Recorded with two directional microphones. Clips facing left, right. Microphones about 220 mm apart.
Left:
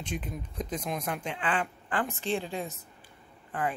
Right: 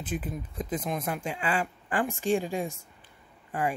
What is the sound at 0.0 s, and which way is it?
Speech, 5° right (ahead or behind).